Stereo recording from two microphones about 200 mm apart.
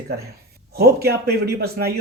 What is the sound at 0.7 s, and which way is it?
Speech, 50° right (ahead or behind).